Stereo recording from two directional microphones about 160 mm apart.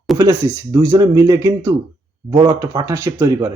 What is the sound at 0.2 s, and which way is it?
Speech, 20° right (ahead or behind).